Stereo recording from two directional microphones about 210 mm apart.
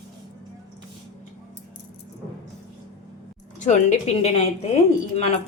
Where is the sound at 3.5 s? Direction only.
35° left (ahead or behind).